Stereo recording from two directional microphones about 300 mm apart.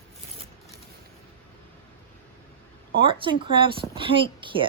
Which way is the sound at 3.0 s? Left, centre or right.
Centre.